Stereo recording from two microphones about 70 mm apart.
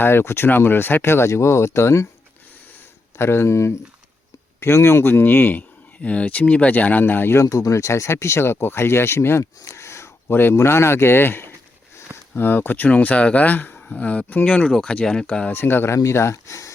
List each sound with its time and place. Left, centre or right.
0.0 s speech: left
3.2 s speech: left
7.4 s speech: left; by 15.4 s centre
15.5 s speech: left